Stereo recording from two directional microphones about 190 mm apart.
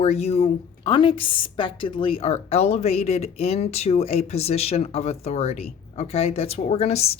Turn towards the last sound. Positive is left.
turn(degrees=35)  # may be behind; listen again after turning